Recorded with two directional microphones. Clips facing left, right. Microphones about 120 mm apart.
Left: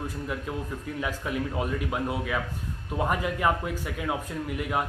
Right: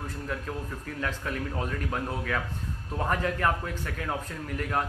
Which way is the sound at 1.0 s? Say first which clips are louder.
Left 2 dB; 10° left (ahead or behind).